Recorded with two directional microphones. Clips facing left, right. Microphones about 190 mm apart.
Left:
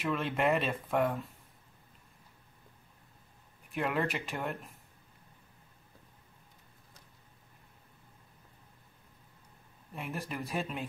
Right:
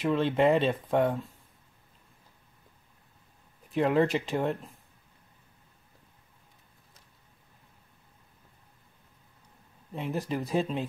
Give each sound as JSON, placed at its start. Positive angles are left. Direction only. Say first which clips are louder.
{"t": 0.1, "sound": "speech", "louder": "right 6 dB", "side_deg": -25}
{"t": 3.8, "sound": "speech", "louder": "right 8 dB", "side_deg": -30}
{"t": 9.9, "sound": "speech", "louder": "right 7 dB", "side_deg": -25}